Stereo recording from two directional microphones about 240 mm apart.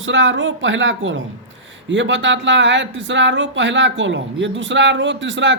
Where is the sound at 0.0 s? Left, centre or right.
Right.